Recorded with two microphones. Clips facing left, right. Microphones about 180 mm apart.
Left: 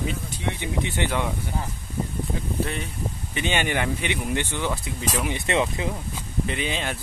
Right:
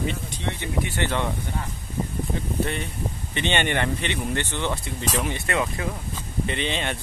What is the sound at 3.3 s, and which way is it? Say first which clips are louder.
Speech: right 1 dB; 5° left (ahead or behind).